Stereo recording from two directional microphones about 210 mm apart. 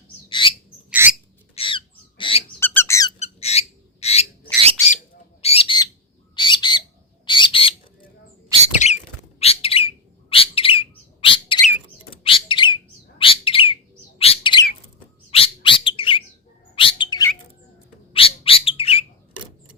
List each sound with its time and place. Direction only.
0.3 s rodents: 25° left (ahead or behind)
0.9 s rodents: 10° right (ahead or behind)
1.5 s a sound: 25° left (ahead or behind)
2.6 s squeak: 10° left (ahead or behind)
3.2 s a sound: 30° left (ahead or behind)
5.4 s bird: 30° left (ahead or behind)
8.5 s rodents: 20° right (ahead or behind)
9.4 s bird: 30° left (ahead or behind)